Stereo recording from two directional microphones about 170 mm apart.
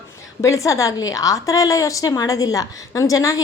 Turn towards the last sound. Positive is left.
turn(degrees=20)  # may be behind; listen again after turning